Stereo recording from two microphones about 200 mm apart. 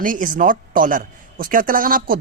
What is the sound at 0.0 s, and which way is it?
Speech, 40° right (ahead or behind).